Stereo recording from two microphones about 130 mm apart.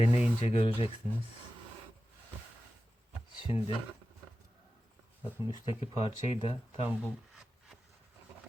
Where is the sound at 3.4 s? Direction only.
45° left (ahead or behind).